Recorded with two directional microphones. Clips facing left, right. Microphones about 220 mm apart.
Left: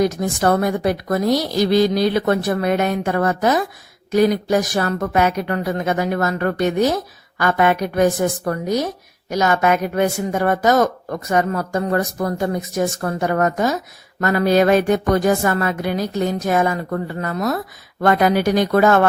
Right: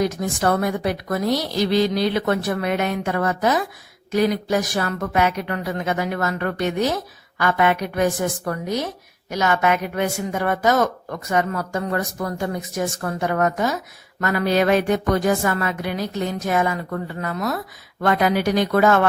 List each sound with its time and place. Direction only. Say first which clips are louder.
0.0 s a woman's voice: left 3 dB; 40° left (ahead or behind)